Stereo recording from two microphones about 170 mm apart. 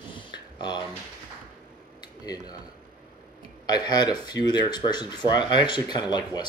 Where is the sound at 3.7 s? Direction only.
25° left (ahead or behind).